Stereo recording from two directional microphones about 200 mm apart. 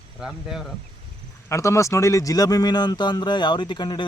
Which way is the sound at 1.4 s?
15° left (ahead or behind).